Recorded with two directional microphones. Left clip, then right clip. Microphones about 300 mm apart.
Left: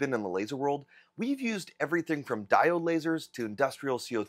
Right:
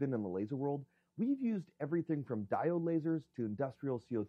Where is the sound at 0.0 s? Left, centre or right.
Centre.